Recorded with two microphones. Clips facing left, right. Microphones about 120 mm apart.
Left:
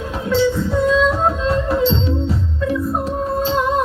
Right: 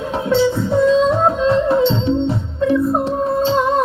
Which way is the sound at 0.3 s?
30° right (ahead or behind).